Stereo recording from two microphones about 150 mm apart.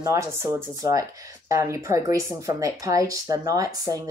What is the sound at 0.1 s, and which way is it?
Speech, 20° right (ahead or behind).